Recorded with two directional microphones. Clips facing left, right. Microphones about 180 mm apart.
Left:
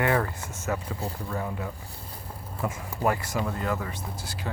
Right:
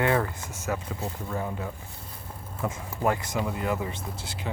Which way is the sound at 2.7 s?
20° right (ahead or behind).